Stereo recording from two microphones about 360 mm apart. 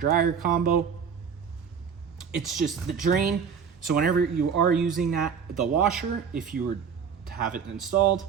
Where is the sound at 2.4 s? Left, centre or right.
Centre.